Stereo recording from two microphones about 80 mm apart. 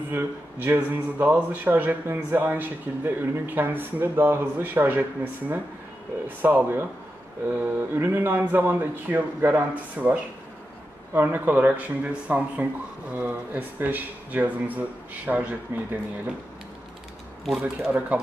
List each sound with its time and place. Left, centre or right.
0.1 s speech: right
11.1 s speech: right
17.8 s speech: centre